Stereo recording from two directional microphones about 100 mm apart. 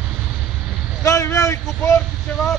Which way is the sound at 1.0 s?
30° left (ahead or behind).